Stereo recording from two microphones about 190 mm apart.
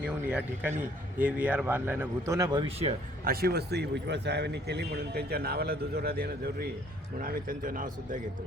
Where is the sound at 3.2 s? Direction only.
55° right (ahead or behind).